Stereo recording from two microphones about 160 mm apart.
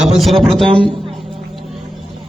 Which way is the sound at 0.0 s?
Centre (ahead or behind).